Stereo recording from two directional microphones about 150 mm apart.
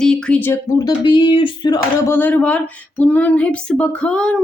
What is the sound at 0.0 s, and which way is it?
Speech, 5° left (ahead or behind).